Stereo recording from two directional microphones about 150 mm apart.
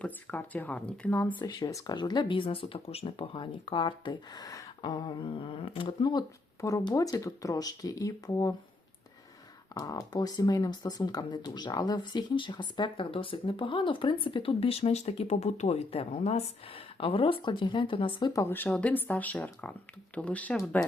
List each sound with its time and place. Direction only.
0.0 s speech: 10° left (ahead or behind)
1.4 s speech: 25° left (ahead or behind)
9.7 s speech: 25° left (ahead or behind)
18.3 s speech: 15° left (ahead or behind)